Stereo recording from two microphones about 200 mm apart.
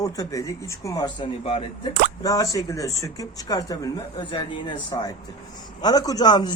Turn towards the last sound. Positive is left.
turn(degrees=20)  # may be behind; listen again after turning